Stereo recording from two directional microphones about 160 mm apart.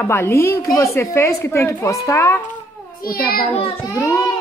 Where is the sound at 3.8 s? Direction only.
20° left (ahead or behind).